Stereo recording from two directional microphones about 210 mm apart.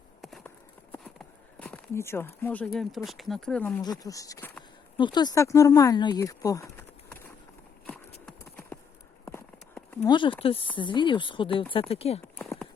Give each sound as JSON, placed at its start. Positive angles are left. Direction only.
{"t": 0.2, "sound": "clip-clop", "side_deg": 0}
{"t": 1.5, "sound": "speech", "side_deg": 5}
{"t": 3.8, "sound": "speech", "side_deg": 15}
{"t": 4.9, "sound": "speech", "side_deg": 20}
{"t": 8.3, "sound": "clip-clop", "side_deg": 5}
{"t": 10.1, "sound": "speech", "side_deg": 25}